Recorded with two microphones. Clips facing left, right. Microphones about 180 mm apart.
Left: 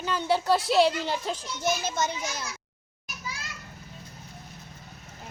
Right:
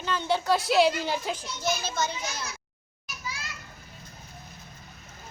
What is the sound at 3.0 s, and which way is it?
Children playing, 55° left (ahead or behind).